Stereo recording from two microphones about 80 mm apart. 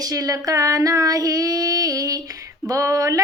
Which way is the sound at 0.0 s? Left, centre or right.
Right.